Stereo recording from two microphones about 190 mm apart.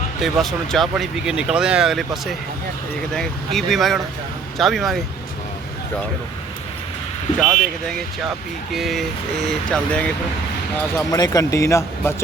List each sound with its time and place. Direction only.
0.2 s speech: centre (ahead or behind)
7.3 s speech: 5° left (ahead or behind)
10.9 s speech: 20° left (ahead or behind)